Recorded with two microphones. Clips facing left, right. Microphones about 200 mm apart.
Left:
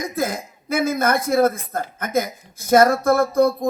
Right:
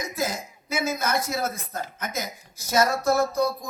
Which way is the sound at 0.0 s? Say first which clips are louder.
Left 5 dB; 55° left (ahead or behind).